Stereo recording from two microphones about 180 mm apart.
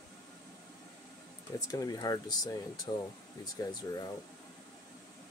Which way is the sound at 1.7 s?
20° left (ahead or behind).